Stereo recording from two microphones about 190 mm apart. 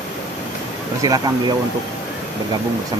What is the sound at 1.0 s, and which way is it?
Speech, 20° right (ahead or behind).